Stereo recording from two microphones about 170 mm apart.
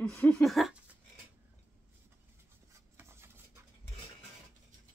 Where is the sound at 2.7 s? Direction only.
15° right (ahead or behind).